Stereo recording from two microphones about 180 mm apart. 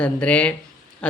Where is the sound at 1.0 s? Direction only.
5° left (ahead or behind).